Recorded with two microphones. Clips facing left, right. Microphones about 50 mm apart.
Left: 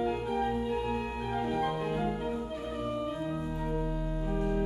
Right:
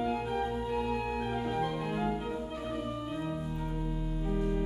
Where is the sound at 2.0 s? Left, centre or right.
Centre.